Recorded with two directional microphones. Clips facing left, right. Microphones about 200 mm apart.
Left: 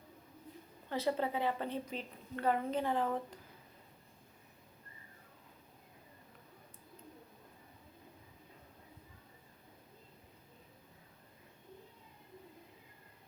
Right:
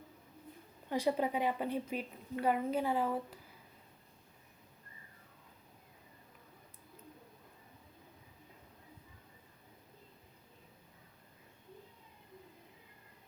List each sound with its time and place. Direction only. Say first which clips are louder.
0.9 s a woman's voice: right 2 dB; 15° right (ahead or behind)